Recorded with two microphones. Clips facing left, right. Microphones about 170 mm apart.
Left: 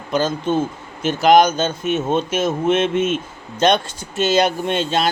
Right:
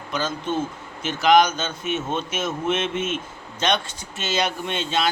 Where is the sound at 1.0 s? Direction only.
45° left (ahead or behind).